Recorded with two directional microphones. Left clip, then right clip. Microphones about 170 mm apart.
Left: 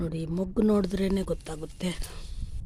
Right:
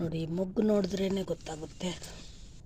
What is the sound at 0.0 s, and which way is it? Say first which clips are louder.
Speech: left 1 dB; 15° left (ahead or behind).